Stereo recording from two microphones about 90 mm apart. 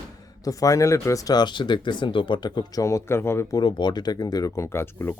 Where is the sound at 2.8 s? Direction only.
30° left (ahead or behind).